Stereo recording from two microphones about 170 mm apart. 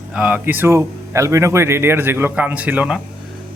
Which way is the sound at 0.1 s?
5° right (ahead or behind).